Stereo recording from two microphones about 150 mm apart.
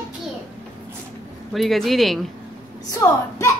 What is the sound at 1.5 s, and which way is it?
Speech, centre (ahead or behind).